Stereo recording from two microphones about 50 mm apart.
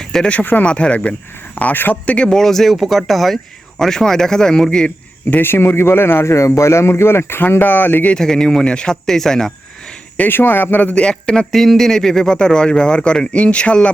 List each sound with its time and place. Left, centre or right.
0.0 s a sound: centre
0.3 s speech: left
1.5 s a man's voice: left
2.0 s speech: left
2.3 s speech: centre
5.4 s speech: left
6.3 s speech: left
8.1 s speech: centre
10.2 s speech: left
10.9 s speech: centre
11.5 s speech: centre; by 13.7 s left